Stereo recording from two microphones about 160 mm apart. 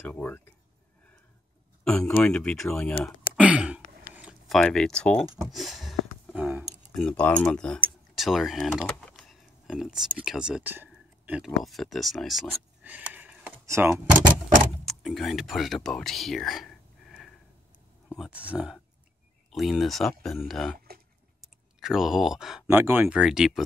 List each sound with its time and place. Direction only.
0.0 s speech: 10° left (ahead or behind)
1.9 s speech: 5° left (ahead or behind)
3.3 s a sound: 10° right (ahead or behind)
4.6 s speech: 5° left (ahead or behind)
6.9 s speech: 5° left (ahead or behind); by 14.2 s 15° right (ahead or behind)
14.9 s speech: centre (ahead or behind)
20.7 s speech: 75° right (ahead or behind)
21.4 s clicking: 5° right (ahead or behind)
22.7 s speech: 15° right (ahead or behind)